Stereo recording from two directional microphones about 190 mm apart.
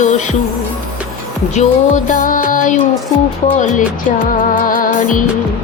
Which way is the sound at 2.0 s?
45° left (ahead or behind).